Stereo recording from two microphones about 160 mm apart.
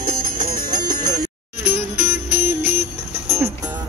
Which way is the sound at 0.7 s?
25° right (ahead or behind).